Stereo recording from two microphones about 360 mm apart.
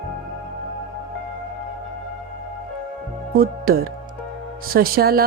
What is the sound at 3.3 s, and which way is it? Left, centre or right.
Speech, right.